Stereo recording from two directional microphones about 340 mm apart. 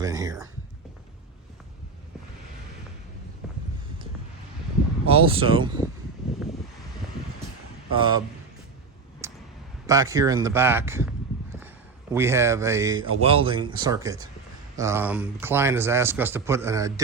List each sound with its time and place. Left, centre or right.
0.0 s speech: centre
5.0 s speech: centre
7.9 s speech: centre
9.2 s a sound: centre
9.8 s speech: centre
12.1 s speech: centre